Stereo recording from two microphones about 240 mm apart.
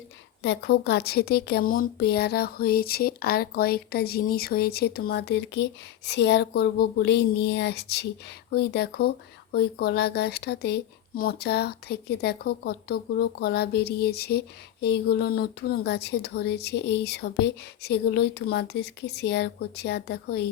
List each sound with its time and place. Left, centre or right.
0.4 s speech: left